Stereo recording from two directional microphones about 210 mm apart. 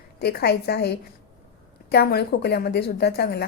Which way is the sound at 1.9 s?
50° left (ahead or behind).